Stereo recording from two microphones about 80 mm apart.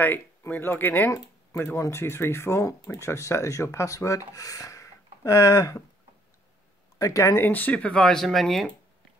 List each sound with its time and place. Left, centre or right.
0.0 s speech: left
7.0 s speech: left
7.3 s speech: left; by 8.6 s centre